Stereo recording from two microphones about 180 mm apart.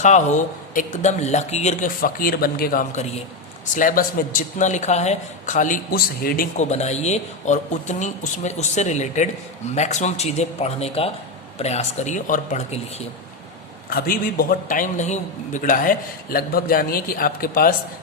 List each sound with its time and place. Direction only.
0.0 s a man's voice: 40° left (ahead or behind)
3.8 s a man's voice: 50° left (ahead or behind)
13.9 s a man's voice: 55° left (ahead or behind)